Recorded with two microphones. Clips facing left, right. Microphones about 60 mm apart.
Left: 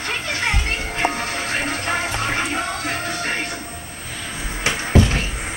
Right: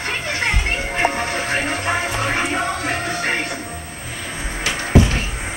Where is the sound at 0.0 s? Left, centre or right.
Right.